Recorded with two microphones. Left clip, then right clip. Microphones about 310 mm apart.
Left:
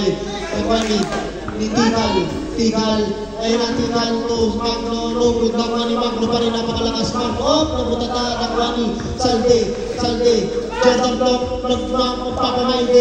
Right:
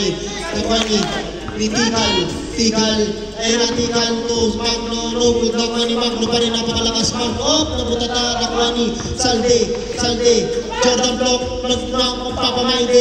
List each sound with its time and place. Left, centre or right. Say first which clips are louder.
0.7 s a man's voice: right 1 dB; right